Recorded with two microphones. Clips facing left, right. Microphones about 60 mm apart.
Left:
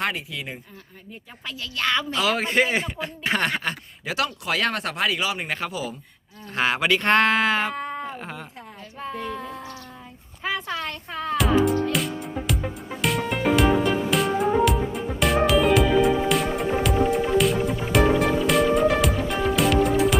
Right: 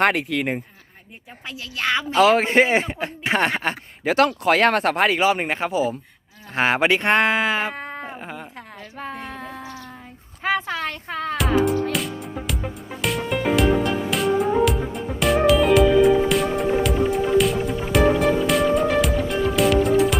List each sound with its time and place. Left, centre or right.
0.0 s speech: right
1.5 s a man's voice: right
4.0 s a man's voice: right
7.1 s speech: centre
7.7 s cat: right
8.2 s speech: centre
9.3 s a sound: right
11.6 s music: centre